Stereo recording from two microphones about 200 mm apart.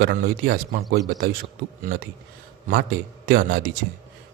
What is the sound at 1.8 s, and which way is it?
Speech, 45° right (ahead or behind).